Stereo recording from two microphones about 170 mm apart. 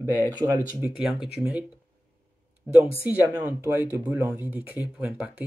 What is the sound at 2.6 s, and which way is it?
Speech, 15° right (ahead or behind).